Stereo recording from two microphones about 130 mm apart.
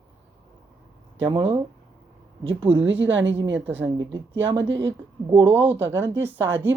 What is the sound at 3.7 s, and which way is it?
Speech, 15° right (ahead or behind).